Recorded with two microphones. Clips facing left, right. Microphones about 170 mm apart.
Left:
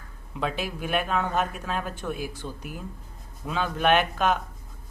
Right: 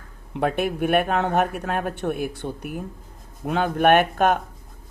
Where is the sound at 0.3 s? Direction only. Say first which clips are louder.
Right 7 dB; 60° right (ahead or behind).